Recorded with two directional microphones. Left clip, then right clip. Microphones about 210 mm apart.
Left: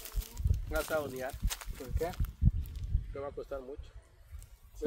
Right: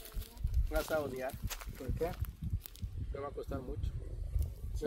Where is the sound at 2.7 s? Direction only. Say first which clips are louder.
Left 2 dB; 50° right (ahead or behind).